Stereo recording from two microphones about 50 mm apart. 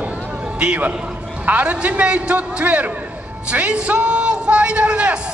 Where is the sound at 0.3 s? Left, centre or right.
Right.